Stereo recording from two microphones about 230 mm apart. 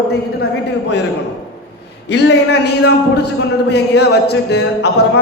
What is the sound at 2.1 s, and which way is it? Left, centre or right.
A man's voice, left.